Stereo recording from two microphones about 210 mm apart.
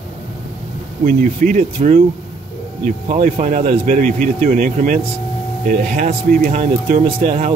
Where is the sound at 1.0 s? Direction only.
40° right (ahead or behind).